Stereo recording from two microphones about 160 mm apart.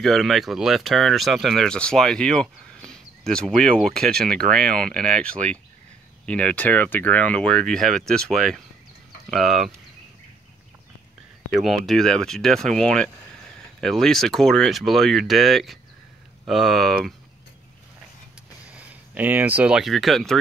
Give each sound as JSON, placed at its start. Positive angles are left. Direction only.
{"t": 0.0, "sound": "speech", "side_deg": 0}
{"t": 11.5, "sound": "speech", "side_deg": 0}
{"t": 18.7, "sound": "speech", "side_deg": -10}